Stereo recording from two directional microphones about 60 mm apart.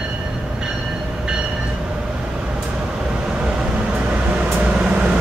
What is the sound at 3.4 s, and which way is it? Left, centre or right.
Vehicle, centre.